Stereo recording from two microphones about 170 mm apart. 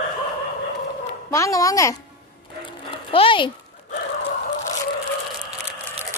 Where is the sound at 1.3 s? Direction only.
20° left (ahead or behind).